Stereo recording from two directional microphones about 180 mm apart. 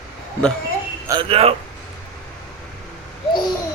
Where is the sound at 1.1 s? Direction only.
30° right (ahead or behind).